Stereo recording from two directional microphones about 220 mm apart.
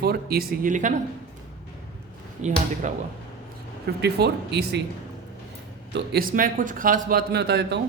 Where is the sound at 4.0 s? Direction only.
50° right (ahead or behind).